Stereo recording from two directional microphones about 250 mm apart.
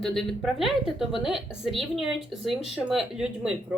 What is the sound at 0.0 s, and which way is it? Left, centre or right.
A woman's voice, centre.